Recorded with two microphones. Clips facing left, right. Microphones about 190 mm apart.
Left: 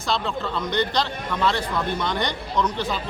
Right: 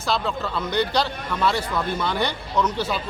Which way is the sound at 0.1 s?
5° right (ahead or behind).